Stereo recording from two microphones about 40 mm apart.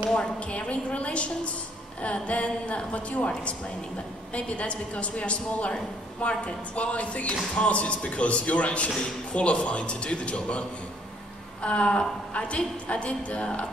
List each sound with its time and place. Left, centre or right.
0.1 s a woman's voice: left
4.3 s a woman's voice: left
11.6 s a woman's voice: left